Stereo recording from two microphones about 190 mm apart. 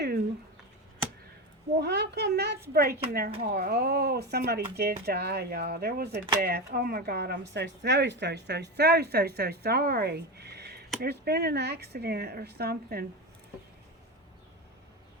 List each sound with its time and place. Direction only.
1.8 s speech: 60° right (ahead or behind)